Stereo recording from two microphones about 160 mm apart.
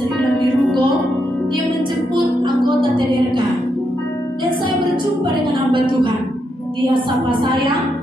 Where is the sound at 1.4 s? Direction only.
30° right (ahead or behind).